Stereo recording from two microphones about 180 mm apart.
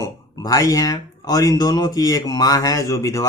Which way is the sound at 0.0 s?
20° left (ahead or behind).